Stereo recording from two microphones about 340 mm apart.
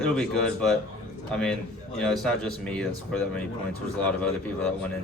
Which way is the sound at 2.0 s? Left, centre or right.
Centre.